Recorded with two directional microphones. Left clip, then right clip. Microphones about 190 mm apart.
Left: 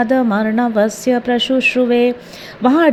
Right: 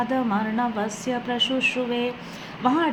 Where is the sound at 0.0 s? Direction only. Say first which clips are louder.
Left 9 dB; 40° left (ahead or behind).